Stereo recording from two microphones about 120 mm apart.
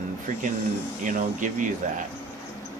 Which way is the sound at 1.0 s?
90° right.